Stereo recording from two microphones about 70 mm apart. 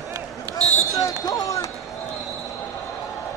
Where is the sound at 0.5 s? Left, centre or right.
Right.